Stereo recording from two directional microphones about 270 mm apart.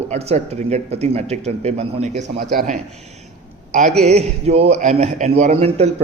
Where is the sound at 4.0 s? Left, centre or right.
Right.